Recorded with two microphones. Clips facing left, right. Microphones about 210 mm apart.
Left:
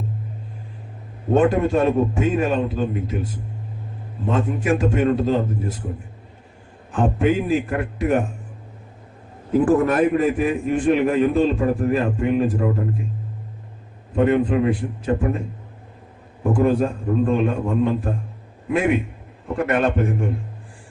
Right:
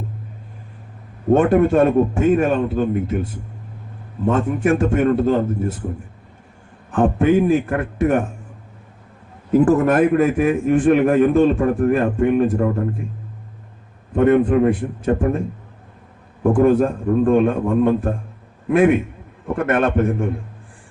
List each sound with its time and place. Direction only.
1.3 s a man's voice: 55° right (ahead or behind)
4.3 s a man's voice: 50° right (ahead or behind)
6.9 s a man's voice: 55° right (ahead or behind)
9.6 s a man's voice: 50° right (ahead or behind)
14.2 s a man's voice: 50° right (ahead or behind)
16.4 s a man's voice: 55° right (ahead or behind)